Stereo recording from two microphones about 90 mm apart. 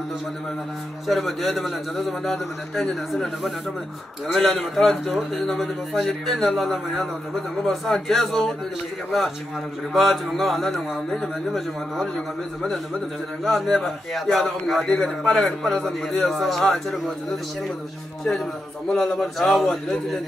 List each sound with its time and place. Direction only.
1.0 s a man's voice: centre (ahead or behind)
9.9 s a man's voice: centre (ahead or behind)
13.4 s a man's voice: 5° left (ahead or behind)
18.9 s a man's voice: 5° left (ahead or behind)